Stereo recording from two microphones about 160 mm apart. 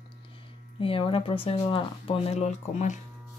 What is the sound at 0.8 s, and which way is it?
Speech, 35° left (ahead or behind).